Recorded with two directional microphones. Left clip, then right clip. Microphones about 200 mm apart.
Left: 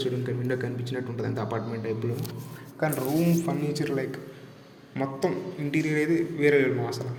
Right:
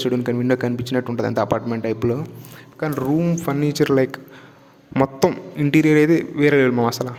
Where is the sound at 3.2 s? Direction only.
45° right (ahead or behind).